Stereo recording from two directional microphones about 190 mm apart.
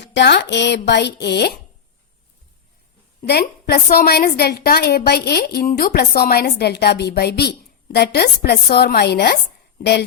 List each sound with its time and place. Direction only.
0.0 s a woman's voice: 65° left (ahead or behind)
3.2 s a woman's voice: 60° left (ahead or behind)